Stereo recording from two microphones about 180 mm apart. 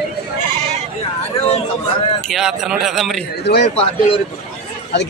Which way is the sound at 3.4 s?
70° left (ahead or behind).